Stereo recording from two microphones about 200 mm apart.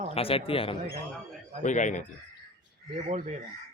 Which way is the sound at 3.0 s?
35° right (ahead or behind).